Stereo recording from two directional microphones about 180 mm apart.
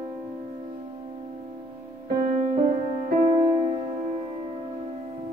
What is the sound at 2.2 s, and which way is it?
Music, 45° right (ahead or behind).